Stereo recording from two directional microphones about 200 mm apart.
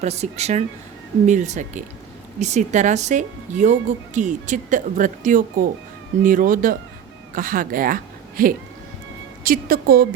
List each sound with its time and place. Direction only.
0.0 s a woman's voice: 35° right (ahead or behind); by 10.1 s 50° right (ahead or behind)